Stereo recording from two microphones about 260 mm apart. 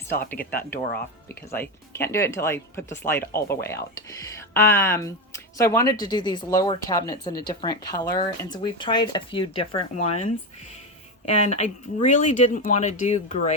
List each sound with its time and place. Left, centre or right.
0.5 s speech: centre; by 10.2 s left
11.3 s speech: left